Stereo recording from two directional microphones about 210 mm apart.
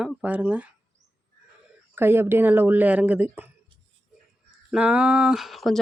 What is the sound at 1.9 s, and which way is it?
Speech, 10° right (ahead or behind).